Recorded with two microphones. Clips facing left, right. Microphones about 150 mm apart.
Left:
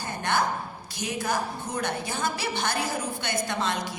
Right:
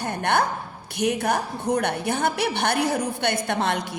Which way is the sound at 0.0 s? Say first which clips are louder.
Right 4 dB; 60° right (ahead or behind).